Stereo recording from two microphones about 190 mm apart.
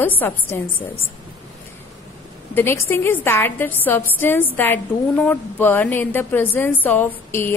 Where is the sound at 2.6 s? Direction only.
10° left (ahead or behind).